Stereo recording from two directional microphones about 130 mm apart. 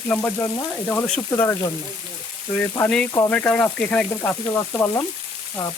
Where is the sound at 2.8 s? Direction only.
5° left (ahead or behind).